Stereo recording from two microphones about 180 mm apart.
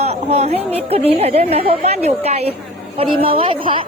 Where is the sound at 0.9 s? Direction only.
35° right (ahead or behind).